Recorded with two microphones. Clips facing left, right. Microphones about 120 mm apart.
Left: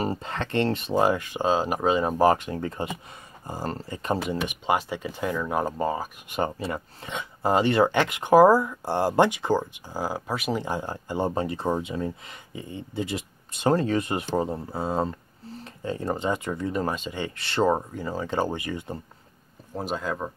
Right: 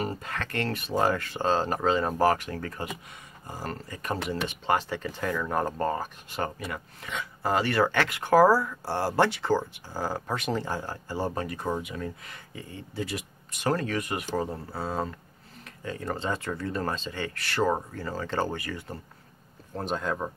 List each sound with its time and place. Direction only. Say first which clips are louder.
0.0 s speech: left 4 dB; 30° left (ahead or behind)
4.5 s speech: right 1 dB; 15° left (ahead or behind)
6.6 s speech: left 5 dB; 30° left (ahead or behind)
15.6 s a sound: left 5 dB; 30° left (ahead or behind)
16.2 s speech: left 4 dB; 15° left (ahead or behind)
19.7 s speech: left 1 dB; 5° left (ahead or behind)